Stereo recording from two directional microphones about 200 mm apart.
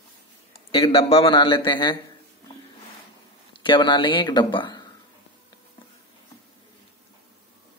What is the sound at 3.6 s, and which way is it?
A man's voice, 25° left (ahead or behind).